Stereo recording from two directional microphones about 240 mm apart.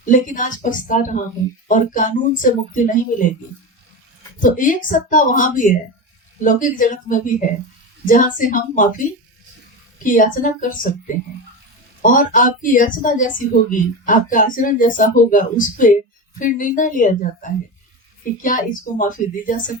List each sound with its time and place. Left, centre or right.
0.0 s a woman's voice: left
4.4 s a woman's voice: left
10.0 s a woman's voice: left
12.0 s a woman's voice: left